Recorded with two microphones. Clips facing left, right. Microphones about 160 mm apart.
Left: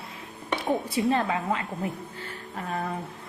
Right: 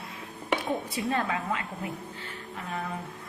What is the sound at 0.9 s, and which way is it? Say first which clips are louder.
Speech: left 5 dB; 25° left (ahead or behind).